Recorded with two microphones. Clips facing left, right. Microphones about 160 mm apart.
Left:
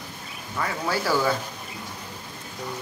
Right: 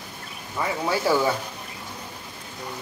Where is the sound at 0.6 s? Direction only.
15° right (ahead or behind).